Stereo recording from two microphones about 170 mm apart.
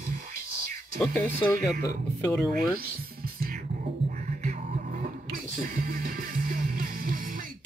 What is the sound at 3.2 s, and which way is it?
Music, 60° right (ahead or behind).